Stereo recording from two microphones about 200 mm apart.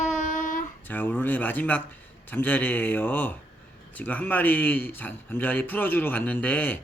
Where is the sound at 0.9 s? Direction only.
10° left (ahead or behind).